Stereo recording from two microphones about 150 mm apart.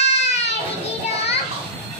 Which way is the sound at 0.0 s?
45° left (ahead or behind).